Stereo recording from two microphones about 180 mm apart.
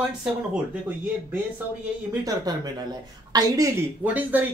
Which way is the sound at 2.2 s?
20° right (ahead or behind).